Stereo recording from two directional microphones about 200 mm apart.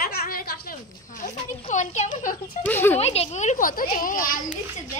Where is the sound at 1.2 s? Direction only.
35° left (ahead or behind).